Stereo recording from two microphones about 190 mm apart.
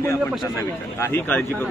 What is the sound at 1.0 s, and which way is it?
Speech, 10° left (ahead or behind).